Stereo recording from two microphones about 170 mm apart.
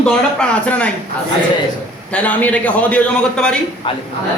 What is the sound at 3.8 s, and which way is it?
Speech, 30° left (ahead or behind).